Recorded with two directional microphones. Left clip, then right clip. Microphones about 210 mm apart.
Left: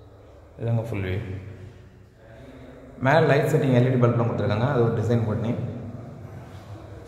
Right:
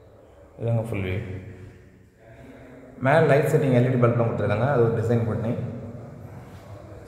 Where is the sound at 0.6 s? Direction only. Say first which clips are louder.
Right 2 dB; 5° right (ahead or behind).